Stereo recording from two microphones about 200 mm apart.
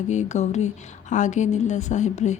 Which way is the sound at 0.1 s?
35° left (ahead or behind).